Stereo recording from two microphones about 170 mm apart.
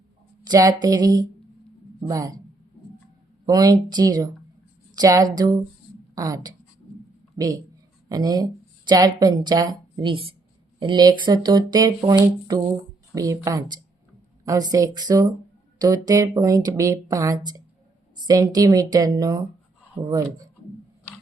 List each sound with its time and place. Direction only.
0.4 s speech: 25° right (ahead or behind)
3.4 s speech: 20° right (ahead or behind)